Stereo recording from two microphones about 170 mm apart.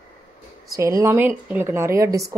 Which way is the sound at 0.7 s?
20° right (ahead or behind).